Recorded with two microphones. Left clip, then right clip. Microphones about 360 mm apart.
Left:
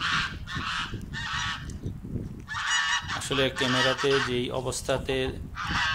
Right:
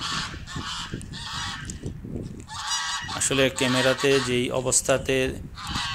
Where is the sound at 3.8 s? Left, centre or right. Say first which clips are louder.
Right 3 dB; centre.